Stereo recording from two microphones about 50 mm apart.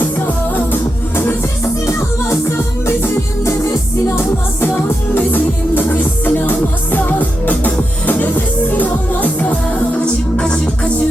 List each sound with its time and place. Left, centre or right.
1.6 s music: left
5.1 s music: left
10.3 s music: centre